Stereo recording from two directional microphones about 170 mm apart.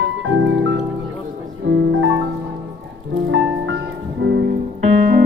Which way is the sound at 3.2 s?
90° right.